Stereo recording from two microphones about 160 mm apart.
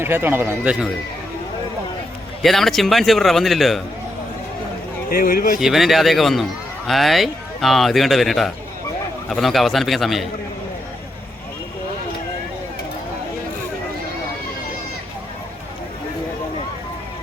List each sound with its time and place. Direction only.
0.0 s speech: 15° right (ahead or behind)
2.4 s a man's voice: centre (ahead or behind)
5.1 s speech: 60° left (ahead or behind)
5.5 s a man's voice: centre (ahead or behind)